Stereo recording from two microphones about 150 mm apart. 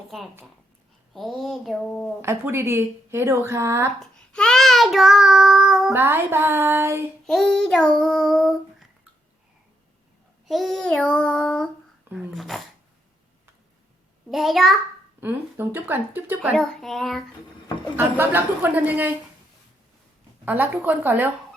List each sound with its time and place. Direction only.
1.1 s child singing: centre (ahead or behind)
2.2 s a woman's voice: 15° right (ahead or behind)
4.0 s child singing: 5° left (ahead or behind)
5.9 s a woman's voice: 15° right (ahead or behind)
7.3 s child singing: 5° left (ahead or behind)
10.4 s child singing: centre (ahead or behind)
14.3 s child singing: centre (ahead or behind)
15.2 s a woman's voice: 15° right (ahead or behind)
16.6 s child singing: centre (ahead or behind)
17.9 s a woman's voice: 15° right (ahead or behind)
20.4 s a woman's voice: 10° right (ahead or behind)